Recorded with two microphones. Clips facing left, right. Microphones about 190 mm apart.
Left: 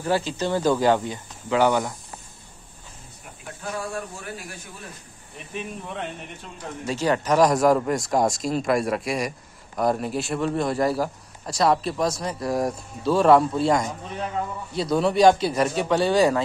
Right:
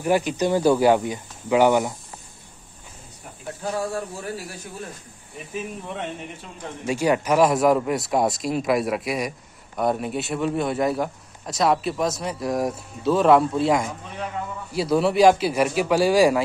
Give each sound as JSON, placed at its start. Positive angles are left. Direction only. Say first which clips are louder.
{"t": 0.0, "sound": "speech", "louder": "right 3 dB", "side_deg": -15}
{"t": 5.5, "sound": "a man's voice", "louder": "right 2 dB", "side_deg": 0}
{"t": 6.9, "sound": "a man's voice", "louder": "right 2 dB", "side_deg": -10}